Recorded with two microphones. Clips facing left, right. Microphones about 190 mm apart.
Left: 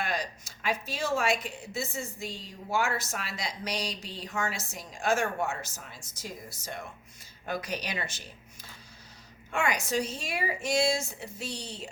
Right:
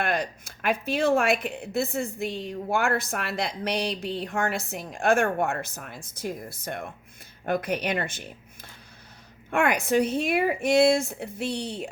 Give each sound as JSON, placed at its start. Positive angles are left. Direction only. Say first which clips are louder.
{"t": 0.0, "sound": "a woman's voice", "louder": "right 6 dB", "side_deg": -55}
{"t": 9.5, "sound": "a woman's voice", "louder": "right 6 dB", "side_deg": -55}